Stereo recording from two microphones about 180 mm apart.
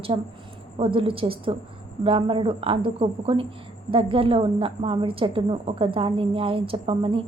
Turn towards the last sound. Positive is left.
turn(degrees=-30)  # may be behind; listen again after turning